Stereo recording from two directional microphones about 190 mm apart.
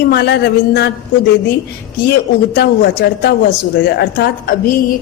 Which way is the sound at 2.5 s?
55° left (ahead or behind).